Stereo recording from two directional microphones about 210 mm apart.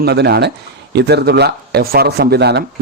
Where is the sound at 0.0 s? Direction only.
50° right (ahead or behind).